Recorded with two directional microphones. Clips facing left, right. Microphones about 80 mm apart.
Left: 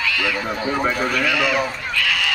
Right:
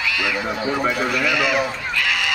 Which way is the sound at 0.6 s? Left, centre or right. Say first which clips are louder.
Left 1 dB; left.